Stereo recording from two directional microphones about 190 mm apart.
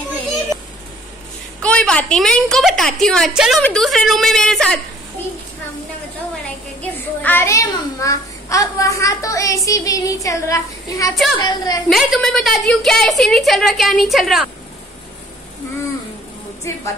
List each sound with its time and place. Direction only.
1.6 s a woman's voice: 5° left (ahead or behind)
6.8 s a child's voice: 10° left (ahead or behind)
11.9 s a woman's voice: centre (ahead or behind)